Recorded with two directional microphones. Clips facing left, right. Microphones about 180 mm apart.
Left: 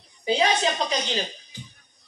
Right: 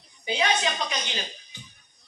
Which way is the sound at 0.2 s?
35° left (ahead or behind).